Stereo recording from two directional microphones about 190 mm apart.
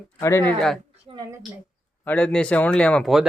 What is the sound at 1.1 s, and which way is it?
Speech, 20° right (ahead or behind).